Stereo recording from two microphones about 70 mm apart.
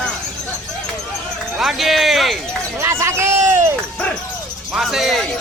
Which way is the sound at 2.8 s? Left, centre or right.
Right.